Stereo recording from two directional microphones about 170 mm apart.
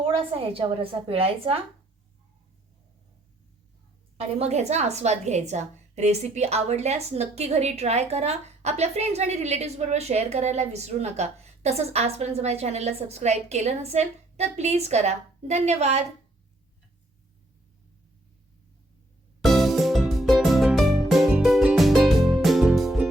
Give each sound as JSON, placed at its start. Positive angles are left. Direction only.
{"t": 0.0, "sound": "a woman's voice", "side_deg": -35}
{"t": 4.4, "sound": "a woman's voice", "side_deg": -40}
{"t": 19.4, "sound": "music", "side_deg": 0}